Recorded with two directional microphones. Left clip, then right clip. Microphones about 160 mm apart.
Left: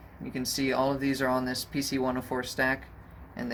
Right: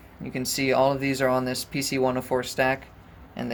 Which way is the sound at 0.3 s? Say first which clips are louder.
Right 5 dB; 40° right (ahead or behind).